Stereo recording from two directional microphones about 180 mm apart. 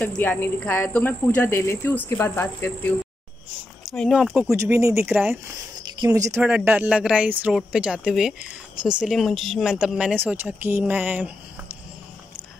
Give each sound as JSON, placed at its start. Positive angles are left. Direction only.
{"t": 0.0, "sound": "speech", "side_deg": 10}
{"t": 3.8, "sound": "speech", "side_deg": 0}
{"t": 4.5, "sound": "speech", "side_deg": -15}